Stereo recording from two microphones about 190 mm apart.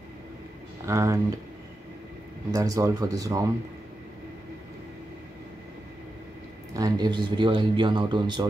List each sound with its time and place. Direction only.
0.8 s speech: 15° right (ahead or behind)
2.5 s speech: 15° right (ahead or behind)
6.7 s speech: 20° right (ahead or behind)